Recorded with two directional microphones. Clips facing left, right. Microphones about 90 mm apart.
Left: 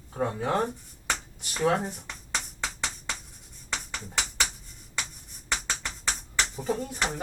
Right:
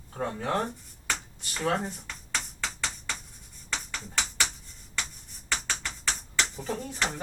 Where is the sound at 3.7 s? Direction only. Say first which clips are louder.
Left 1 dB; 15° left (ahead or behind).